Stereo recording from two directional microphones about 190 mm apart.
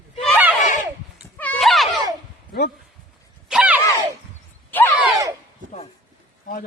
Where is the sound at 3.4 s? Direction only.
5° right (ahead or behind).